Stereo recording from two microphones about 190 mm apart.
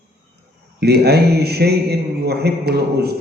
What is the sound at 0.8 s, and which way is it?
A man's voice, 60° right (ahead or behind).